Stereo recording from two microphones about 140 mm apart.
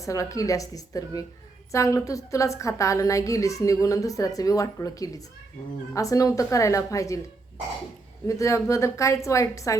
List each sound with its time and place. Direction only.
0.0 s a woman's voice: 25° left (ahead or behind)
8.3 s a woman's voice: 20° left (ahead or behind)